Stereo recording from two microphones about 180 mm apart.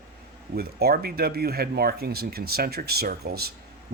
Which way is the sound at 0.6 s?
60° right (ahead or behind).